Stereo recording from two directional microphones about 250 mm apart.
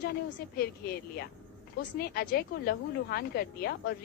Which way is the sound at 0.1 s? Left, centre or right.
Left.